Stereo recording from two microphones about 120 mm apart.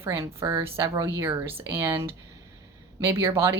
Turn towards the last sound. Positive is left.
turn(degrees=-20)  # may be behind; listen again after turning